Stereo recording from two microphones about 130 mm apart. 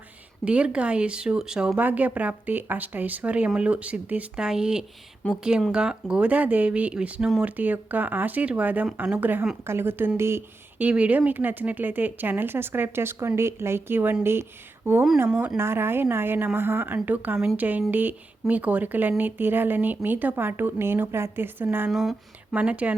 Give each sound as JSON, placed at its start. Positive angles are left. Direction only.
{"t": 0.4, "sound": "speech", "side_deg": -10}
{"t": 21.8, "sound": "speech", "side_deg": 0}